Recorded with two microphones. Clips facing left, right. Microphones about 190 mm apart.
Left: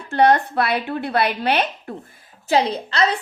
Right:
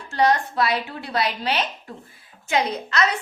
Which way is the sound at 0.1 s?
60° left (ahead or behind).